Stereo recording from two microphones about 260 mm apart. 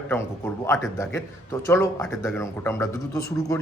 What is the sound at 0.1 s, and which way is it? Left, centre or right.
A man's voice, centre.